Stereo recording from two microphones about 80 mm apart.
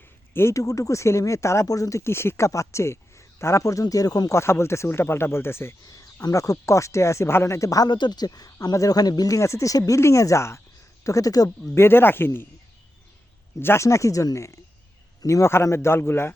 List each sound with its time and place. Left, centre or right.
0.3 s speech: left
5.9 s speech: left
7.9 s speech: left
11.7 s speech: left
13.6 s speech: left